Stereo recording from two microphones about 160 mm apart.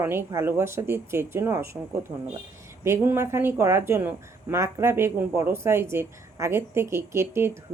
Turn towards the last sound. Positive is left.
turn(degrees=-15)  # may be behind; listen again after turning